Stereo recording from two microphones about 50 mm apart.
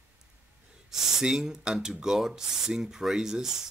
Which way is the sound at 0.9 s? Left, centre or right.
Centre.